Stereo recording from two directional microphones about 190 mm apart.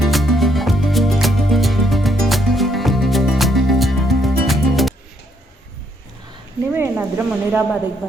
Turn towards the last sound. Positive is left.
turn(degrees=-10)  # may be behind; listen again after turning